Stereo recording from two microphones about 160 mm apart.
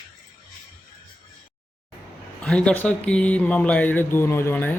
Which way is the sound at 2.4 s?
5° left (ahead or behind).